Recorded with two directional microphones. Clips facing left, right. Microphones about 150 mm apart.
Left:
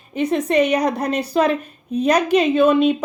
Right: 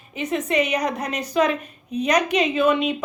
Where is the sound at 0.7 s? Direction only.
30° left (ahead or behind).